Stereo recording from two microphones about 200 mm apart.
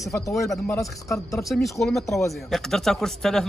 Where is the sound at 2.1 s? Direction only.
15° left (ahead or behind).